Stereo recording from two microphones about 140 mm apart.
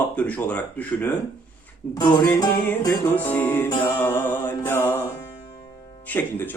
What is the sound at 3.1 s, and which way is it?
Speech, 15° left (ahead or behind).